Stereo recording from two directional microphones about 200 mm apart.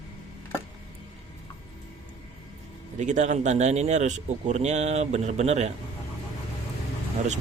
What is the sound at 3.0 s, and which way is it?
Speech, 35° right (ahead or behind).